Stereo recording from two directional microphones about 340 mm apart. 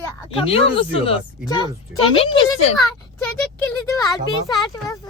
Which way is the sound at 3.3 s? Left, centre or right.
Centre.